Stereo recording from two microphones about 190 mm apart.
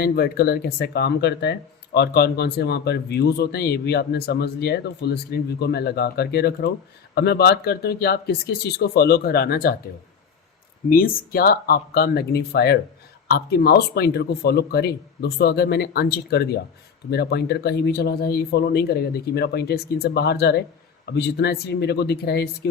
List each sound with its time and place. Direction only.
0.0 s speech: 55° left (ahead or behind)
10.8 s speech: 50° left (ahead or behind)